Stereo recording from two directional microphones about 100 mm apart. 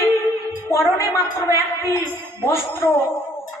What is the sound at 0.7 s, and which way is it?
Speech, 30° left (ahead or behind).